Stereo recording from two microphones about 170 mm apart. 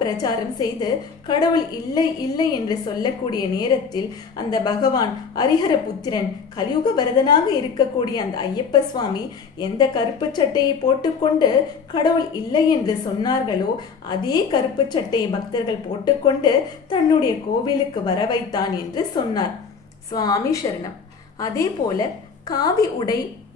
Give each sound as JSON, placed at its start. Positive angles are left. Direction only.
{"t": 0.0, "sound": "a woman's voice", "side_deg": 25}
{"t": 9.6, "sound": "a woman's voice", "side_deg": 25}